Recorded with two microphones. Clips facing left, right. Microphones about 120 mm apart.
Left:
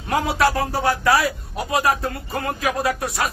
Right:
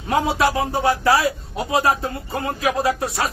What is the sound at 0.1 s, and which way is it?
Speech, 25° right (ahead or behind).